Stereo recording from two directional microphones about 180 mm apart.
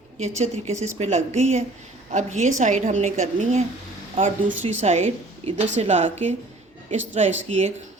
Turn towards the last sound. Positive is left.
turn(degrees=-40)  # may be behind; listen again after turning